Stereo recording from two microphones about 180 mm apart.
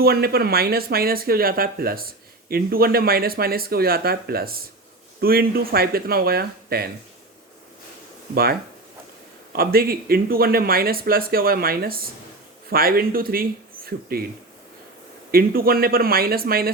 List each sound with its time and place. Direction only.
0.0 s speech: 60° right (ahead or behind)
9.5 s speech: 55° right (ahead or behind)
15.3 s speech: 55° right (ahead or behind)